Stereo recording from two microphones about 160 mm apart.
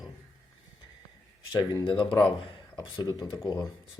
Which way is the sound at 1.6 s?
30° left (ahead or behind).